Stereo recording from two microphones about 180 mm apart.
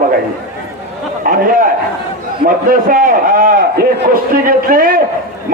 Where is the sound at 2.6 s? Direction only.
50° right (ahead or behind).